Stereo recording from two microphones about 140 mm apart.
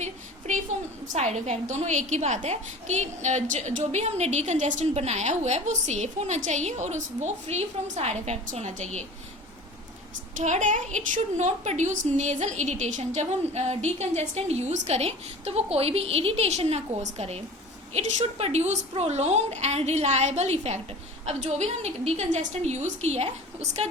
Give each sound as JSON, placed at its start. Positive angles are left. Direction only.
{"t": 0.0, "sound": "a sound", "side_deg": -55}
{"t": 1.0, "sound": "a woman's voice", "side_deg": -55}
{"t": 10.3, "sound": "a woman's voice", "side_deg": -60}